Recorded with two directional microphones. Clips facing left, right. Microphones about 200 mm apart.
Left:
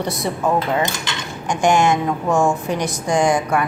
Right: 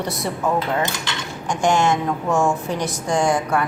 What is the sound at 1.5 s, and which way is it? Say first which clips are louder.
A woman's voice: left 2 dB; 15° left (ahead or behind).